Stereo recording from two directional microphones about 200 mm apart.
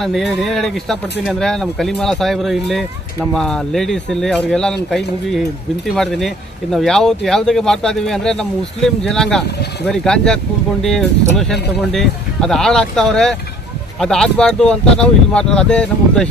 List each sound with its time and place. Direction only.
0.0 s speech: centre (ahead or behind)